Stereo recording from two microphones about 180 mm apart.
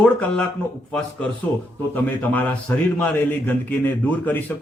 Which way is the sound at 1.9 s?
10° left (ahead or behind).